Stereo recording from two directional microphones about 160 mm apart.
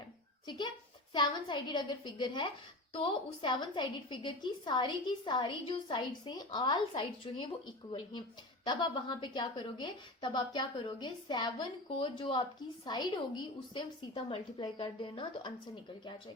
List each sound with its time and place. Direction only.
1.1 s a woman's voice: 30° left (ahead or behind)